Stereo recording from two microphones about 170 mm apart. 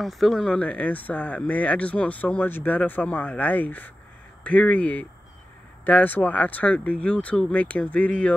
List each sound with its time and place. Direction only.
0.0 s speech: centre (ahead or behind)